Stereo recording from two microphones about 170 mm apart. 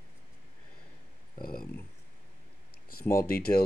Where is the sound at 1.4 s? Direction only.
60° left (ahead or behind).